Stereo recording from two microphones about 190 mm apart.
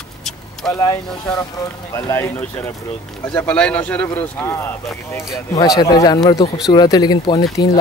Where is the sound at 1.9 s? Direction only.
15° left (ahead or behind).